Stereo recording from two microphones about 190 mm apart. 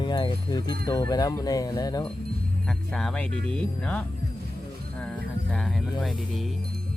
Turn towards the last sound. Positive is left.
turn(degrees=0)  # may be behind; listen again after turning